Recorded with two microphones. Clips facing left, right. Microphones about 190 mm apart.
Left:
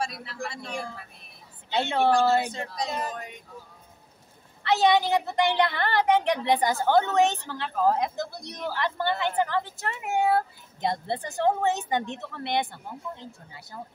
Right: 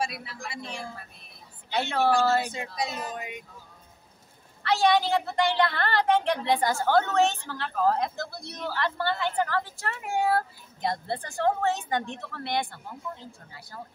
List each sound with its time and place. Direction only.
0.0 s speech: 10° right (ahead or behind)
1.7 s a woman's voice: 20° left (ahead or behind)
2.5 s speech: 10° right (ahead or behind)
4.6 s a woman's voice: 20° left (ahead or behind)